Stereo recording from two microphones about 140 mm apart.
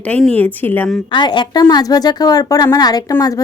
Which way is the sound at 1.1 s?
35° left (ahead or behind).